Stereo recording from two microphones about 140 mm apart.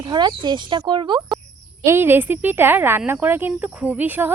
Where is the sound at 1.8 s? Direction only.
15° right (ahead or behind).